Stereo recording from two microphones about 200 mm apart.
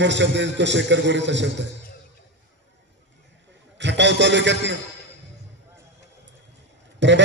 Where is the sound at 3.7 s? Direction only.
60° right (ahead or behind).